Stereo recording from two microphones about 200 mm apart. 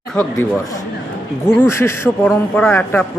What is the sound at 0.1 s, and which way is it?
Speech, 5° left (ahead or behind).